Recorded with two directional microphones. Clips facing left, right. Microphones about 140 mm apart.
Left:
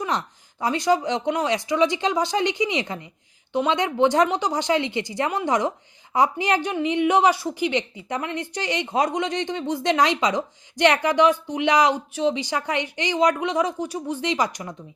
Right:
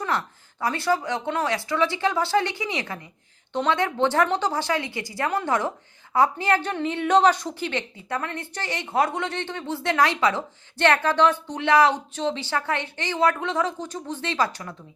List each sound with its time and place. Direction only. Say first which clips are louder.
0.0 s a woman's voice: left 1 dB; 20° left (ahead or behind)